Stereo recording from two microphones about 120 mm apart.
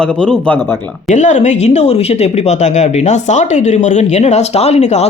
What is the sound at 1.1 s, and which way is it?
Speech, 90° left.